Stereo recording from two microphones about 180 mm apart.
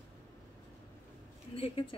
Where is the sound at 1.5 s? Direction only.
30° left (ahead or behind).